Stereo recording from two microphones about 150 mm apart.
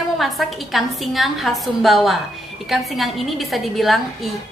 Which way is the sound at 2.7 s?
Centre (ahead or behind).